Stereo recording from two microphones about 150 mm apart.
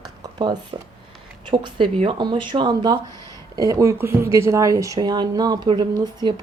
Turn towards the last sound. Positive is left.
turn(degrees=-30)  # may be behind; listen again after turning